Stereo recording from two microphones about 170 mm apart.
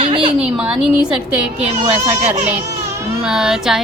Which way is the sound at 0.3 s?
5° right (ahead or behind).